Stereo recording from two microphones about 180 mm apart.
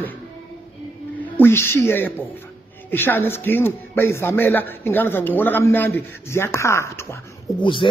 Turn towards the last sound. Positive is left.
turn(degrees=25)  # may be behind; listen again after turning